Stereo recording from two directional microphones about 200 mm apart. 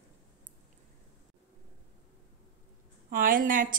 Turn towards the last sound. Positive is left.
turn(degrees=-45)  # may be behind; listen again after turning